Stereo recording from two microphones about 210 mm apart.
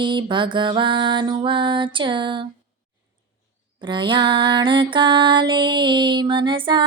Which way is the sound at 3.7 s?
20° right (ahead or behind).